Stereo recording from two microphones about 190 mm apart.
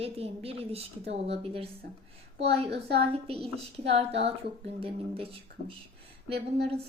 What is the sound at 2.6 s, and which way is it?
Speech, 60° right (ahead or behind).